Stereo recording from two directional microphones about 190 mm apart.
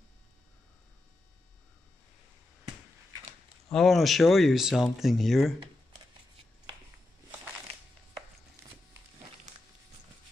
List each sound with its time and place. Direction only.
3.6 s speech: centre (ahead or behind)